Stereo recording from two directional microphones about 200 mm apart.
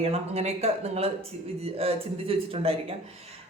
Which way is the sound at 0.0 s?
30° right (ahead or behind).